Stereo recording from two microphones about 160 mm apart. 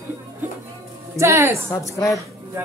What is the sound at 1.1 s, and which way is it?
Speech, 15° right (ahead or behind).